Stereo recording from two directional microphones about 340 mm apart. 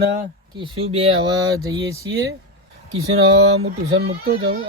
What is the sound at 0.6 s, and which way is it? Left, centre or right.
Speech, centre.